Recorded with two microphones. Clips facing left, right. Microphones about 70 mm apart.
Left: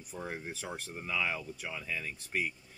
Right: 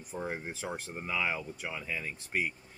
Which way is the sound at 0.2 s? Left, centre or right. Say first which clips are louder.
Right 3 dB; right.